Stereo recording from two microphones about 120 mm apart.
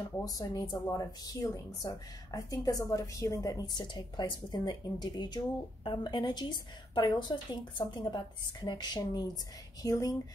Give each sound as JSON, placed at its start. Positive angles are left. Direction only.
{"t": 0.2, "sound": "a woman's voice", "side_deg": 30}